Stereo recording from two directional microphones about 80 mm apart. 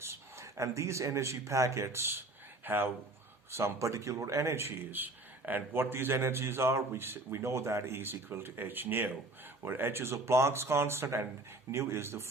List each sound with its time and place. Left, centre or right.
0.0 s speech: right
3.5 s a man's voice: right